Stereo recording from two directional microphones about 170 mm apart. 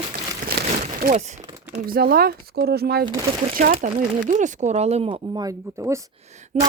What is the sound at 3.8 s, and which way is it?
Speech, 45° right (ahead or behind).